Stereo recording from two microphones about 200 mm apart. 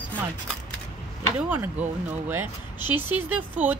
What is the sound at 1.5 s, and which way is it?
Speech, 10° right (ahead or behind).